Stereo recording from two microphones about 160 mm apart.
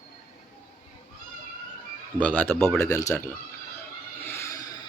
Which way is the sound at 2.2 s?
10° left (ahead or behind).